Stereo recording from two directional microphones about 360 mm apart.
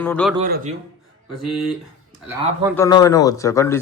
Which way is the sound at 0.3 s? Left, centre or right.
Right.